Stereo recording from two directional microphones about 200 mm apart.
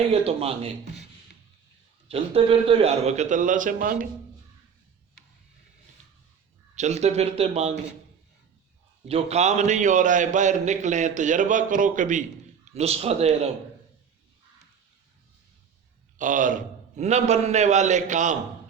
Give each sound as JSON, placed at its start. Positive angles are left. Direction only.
{"t": 0.1, "sound": "speech", "side_deg": -30}
{"t": 2.0, "sound": "a man's voice", "side_deg": -30}
{"t": 6.7, "sound": "a man's voice", "side_deg": -35}
{"t": 9.0, "sound": "a man's voice", "side_deg": -30}
{"t": 16.1, "sound": "a man's voice", "side_deg": -40}